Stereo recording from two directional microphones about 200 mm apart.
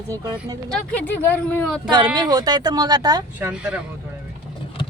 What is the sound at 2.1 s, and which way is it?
Speech, 20° right (ahead or behind).